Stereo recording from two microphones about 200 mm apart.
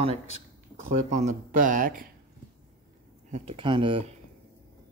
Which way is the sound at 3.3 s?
30° right (ahead or behind).